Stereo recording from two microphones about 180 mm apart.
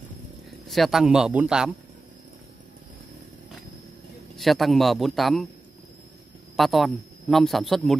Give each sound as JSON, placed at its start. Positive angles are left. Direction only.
{"t": 0.7, "sound": "a man's voice", "side_deg": 0}
{"t": 4.4, "sound": "a man's voice", "side_deg": 0}
{"t": 6.5, "sound": "a man's voice", "side_deg": 0}